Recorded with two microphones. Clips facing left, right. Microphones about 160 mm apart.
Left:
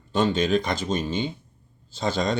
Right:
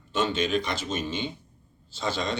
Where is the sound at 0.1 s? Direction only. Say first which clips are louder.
Left 4 dB; 40° left (ahead or behind).